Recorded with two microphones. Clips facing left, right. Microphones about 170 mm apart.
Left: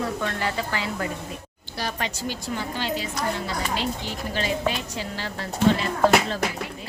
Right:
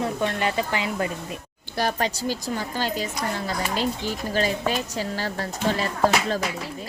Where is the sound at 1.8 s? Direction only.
45° right (ahead or behind).